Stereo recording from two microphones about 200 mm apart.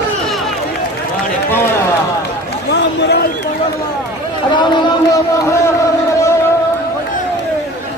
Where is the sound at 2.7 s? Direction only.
55° left (ahead or behind).